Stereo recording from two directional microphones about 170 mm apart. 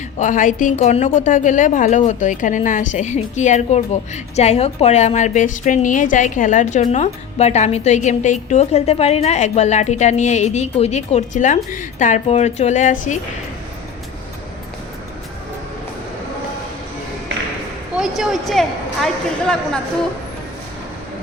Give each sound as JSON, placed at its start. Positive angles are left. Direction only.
{"t": 0.2, "sound": "a woman's voice", "side_deg": 50}
{"t": 17.9, "sound": "a man's voice", "side_deg": 0}